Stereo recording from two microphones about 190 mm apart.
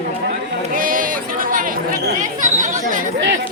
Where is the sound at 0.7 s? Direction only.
45° right (ahead or behind).